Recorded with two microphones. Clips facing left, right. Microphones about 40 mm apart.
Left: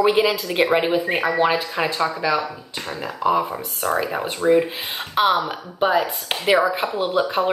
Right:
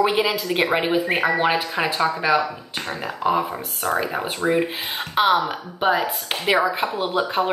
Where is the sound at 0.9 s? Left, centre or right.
Right.